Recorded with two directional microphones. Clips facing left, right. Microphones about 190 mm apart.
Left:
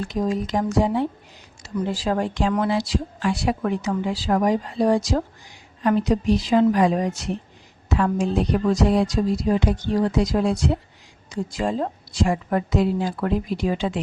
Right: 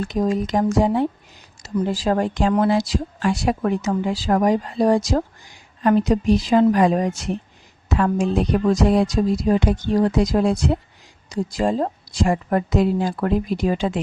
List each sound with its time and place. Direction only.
0.1 s a woman's voice: 50° right (ahead or behind)